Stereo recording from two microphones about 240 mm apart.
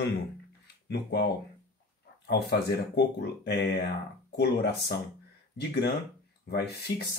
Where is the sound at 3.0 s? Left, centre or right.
Left.